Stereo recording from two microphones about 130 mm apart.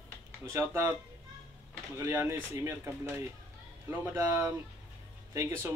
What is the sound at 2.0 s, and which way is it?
Speech, 20° right (ahead or behind).